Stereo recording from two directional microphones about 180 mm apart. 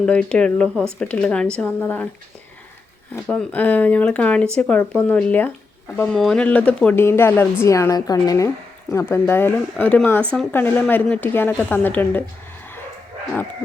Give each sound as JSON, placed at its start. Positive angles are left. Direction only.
{"t": 0.0, "sound": "a woman's voice", "side_deg": 5}
{"t": 3.2, "sound": "a woman's voice", "side_deg": 5}